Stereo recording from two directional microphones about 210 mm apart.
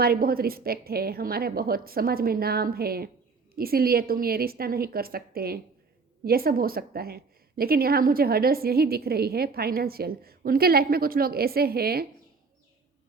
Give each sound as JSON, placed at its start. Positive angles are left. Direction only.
{"t": 0.0, "sound": "a woman's voice", "side_deg": -45}